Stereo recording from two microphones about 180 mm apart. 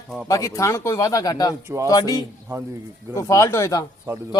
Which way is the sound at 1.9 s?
20° left (ahead or behind).